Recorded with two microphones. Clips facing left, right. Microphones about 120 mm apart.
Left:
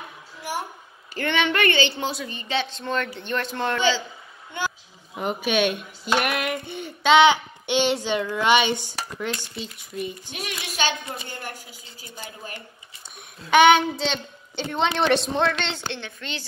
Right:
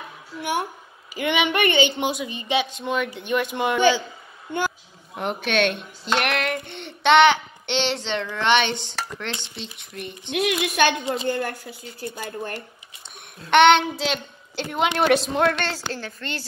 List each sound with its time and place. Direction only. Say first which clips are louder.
0.4 s a woman's voice: right 5 dB; 60° right (ahead or behind)
1.1 s a woman's voice: right 1 dB; 10° right (ahead or behind)
4.5 s a woman's voice: right 5 dB; 50° right (ahead or behind)
5.1 s speech: even; centre (ahead or behind)
10.3 s speech: right 10 dB; 55° right (ahead or behind)
13.5 s a woman's voice: right 1 dB; 5° left (ahead or behind)